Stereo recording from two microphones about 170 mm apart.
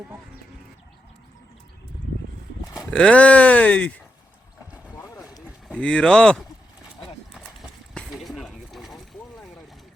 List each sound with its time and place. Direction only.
2.9 s speech: 5° left (ahead or behind)
4.9 s boat: 20° left (ahead or behind)
5.5 s speech: centre (ahead or behind)
7.3 s a sound: centre (ahead or behind)